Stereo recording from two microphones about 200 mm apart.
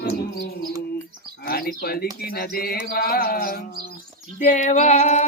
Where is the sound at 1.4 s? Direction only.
50° left (ahead or behind).